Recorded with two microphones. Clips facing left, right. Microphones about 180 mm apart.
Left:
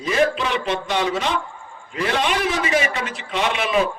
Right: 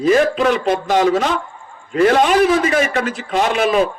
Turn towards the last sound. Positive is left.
turn(degrees=-45)  # may be behind; listen again after turning